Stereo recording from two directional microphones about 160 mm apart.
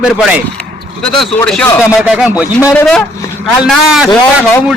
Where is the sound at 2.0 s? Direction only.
5° right (ahead or behind).